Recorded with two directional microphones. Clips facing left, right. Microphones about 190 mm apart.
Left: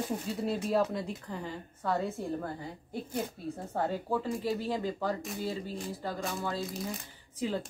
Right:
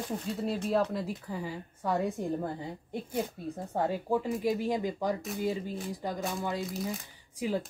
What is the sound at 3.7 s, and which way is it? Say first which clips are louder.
A woman's voice: right 3 dB; 15° right (ahead or behind).